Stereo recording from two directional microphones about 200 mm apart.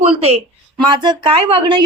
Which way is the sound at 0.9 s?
20° right (ahead or behind).